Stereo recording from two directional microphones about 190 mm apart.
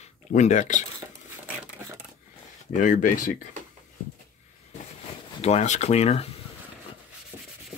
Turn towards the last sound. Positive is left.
turn(degrees=35)  # may be behind; listen again after turning